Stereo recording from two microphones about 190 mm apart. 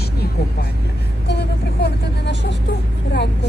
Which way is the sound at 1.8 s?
65° left (ahead or behind).